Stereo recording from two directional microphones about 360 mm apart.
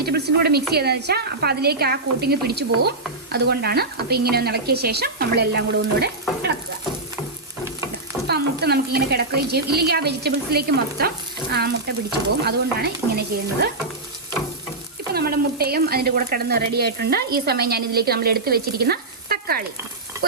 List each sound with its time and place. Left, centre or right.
0.0 s speech: right
8.3 s speech: right
15.1 s speech: right